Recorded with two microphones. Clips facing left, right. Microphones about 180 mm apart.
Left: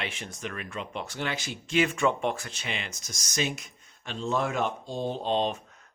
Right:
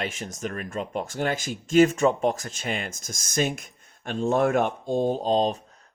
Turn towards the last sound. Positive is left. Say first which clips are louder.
# right 4 dB
turn(degrees=-35)  # may be behind; listen again after turning